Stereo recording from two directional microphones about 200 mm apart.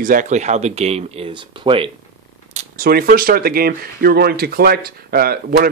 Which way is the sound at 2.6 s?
45° right (ahead or behind).